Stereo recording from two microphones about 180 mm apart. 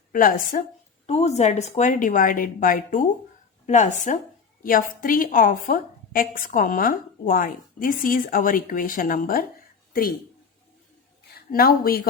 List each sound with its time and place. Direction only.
0.1 s a woman's voice: 50° left (ahead or behind)
1.0 s a woman's voice: 35° left (ahead or behind); by 10.2 s 55° left (ahead or behind)
11.3 s speech: 55° left (ahead or behind)